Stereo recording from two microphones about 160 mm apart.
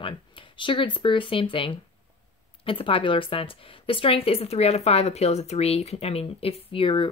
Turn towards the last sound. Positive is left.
turn(degrees=35)  # may be behind; listen again after turning